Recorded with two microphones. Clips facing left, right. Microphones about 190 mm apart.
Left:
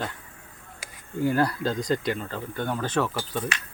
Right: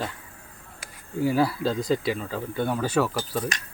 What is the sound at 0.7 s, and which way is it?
Speech, centre (ahead or behind).